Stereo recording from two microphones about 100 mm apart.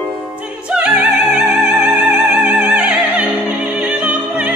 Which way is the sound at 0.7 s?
10° right (ahead or behind).